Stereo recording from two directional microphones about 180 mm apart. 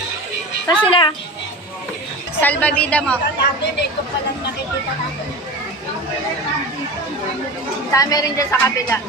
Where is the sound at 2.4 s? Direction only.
10° left (ahead or behind).